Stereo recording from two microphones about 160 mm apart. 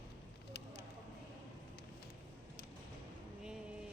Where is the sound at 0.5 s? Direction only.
80° left.